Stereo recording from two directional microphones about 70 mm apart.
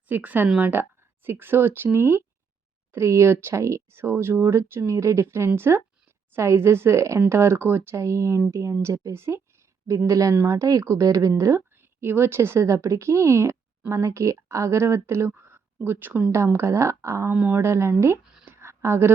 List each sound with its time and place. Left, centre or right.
0.1 s a woman's voice: right
10.1 s a woman's voice: right
16.3 s speech: right
18.4 s a sound: right